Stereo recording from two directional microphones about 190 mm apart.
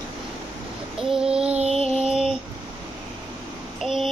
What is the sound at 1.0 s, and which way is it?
Child singing, 5° right (ahead or behind).